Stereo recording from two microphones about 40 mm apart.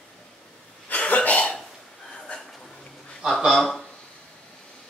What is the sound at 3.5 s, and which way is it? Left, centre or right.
Speech, centre.